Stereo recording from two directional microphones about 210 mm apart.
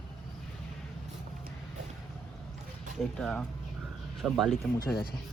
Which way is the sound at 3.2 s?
5° left (ahead or behind).